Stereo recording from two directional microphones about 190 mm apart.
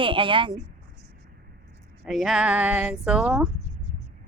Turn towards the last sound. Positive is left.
turn(degrees=-5)  # may be behind; listen again after turning